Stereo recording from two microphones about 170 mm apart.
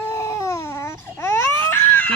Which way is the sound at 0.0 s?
15° left (ahead or behind).